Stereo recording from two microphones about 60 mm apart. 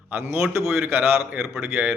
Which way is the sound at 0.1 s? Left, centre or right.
Right.